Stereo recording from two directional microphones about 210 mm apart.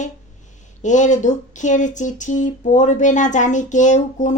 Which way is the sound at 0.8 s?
35° left (ahead or behind).